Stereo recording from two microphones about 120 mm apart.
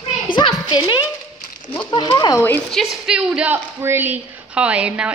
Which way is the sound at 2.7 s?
Centre (ahead or behind).